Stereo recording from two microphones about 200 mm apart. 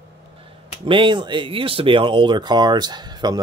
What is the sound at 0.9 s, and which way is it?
Speech, 25° right (ahead or behind).